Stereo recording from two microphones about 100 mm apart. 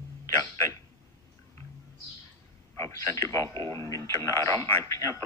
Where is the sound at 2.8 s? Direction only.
25° left (ahead or behind).